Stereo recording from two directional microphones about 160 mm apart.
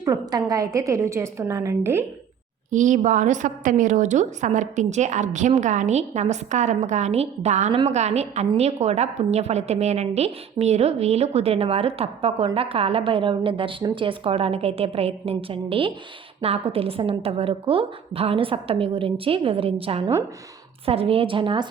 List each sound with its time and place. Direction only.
0.0 s a woman's voice: 25° right (ahead or behind)
2.6 s a woman's voice: 50° right (ahead or behind); by 21.7 s 30° right (ahead or behind)